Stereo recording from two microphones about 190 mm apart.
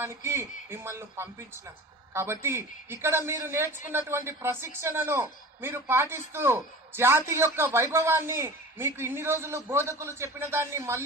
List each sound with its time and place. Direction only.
0.0 s speech: 15° right (ahead or behind)